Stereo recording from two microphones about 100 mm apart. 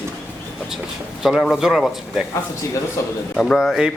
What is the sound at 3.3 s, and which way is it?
Speech, centre (ahead or behind).